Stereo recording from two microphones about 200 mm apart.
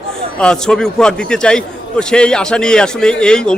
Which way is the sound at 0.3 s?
5° left (ahead or behind).